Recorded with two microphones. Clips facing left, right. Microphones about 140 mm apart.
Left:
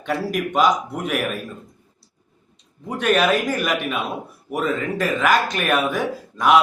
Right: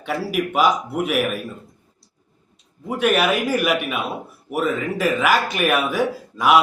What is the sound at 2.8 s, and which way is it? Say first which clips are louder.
A man's voice: even; 10° right (ahead or behind).